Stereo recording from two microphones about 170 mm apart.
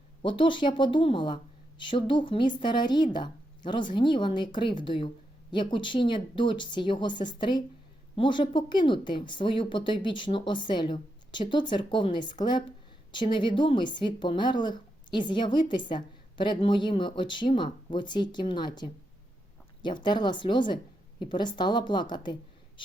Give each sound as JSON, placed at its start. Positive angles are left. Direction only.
{"t": 0.2, "sound": "a woman's voice", "side_deg": 30}